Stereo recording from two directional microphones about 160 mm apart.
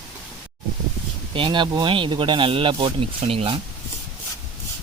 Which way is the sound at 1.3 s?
30° right (ahead or behind).